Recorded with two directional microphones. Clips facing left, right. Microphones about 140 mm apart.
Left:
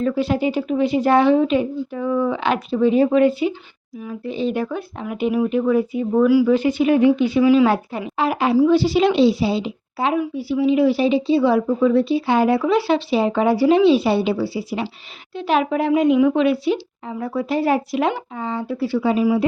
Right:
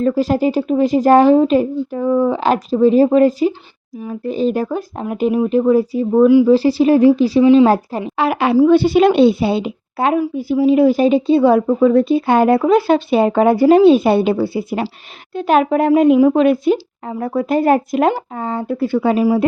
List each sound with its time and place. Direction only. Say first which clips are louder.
0.0 s a woman's voice: right 4 dB; 40° right (ahead or behind)
8.1 s a woman's voice: right 3 dB; 70° right (ahead or behind)
8.5 s a woman's voice: right 5 dB; 55° right (ahead or behind)
10.2 s a woman's voice: right 4 dB; 40° right (ahead or behind)